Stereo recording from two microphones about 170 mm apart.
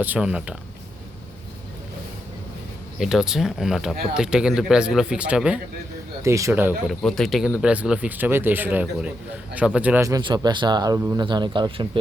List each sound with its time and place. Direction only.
0.0 s speech: 10° right (ahead or behind)
3.0 s speech: 5° right (ahead or behind)
6.2 s speech: 15° right (ahead or behind)
7.0 s speech: centre (ahead or behind); by 11.9 s 30° right (ahead or behind)